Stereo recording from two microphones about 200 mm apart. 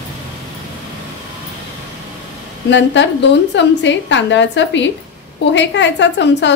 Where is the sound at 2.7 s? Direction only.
65° left (ahead or behind).